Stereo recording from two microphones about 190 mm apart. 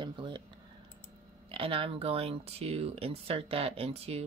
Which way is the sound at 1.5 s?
30° right (ahead or behind).